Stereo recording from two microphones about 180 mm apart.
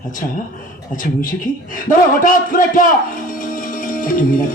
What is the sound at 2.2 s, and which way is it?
Speech, 50° left (ahead or behind).